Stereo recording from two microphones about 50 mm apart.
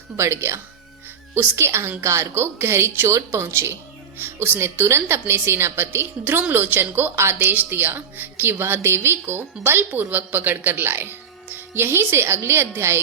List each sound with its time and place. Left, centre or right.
0.2 s speech: right
1.4 s speech: right
2.0 s a woman's voice: right
2.4 s a woman's voice: right
3.1 s a woman's voice: right
7.2 s a woman's voice: right
9.9 s a woman's voice: right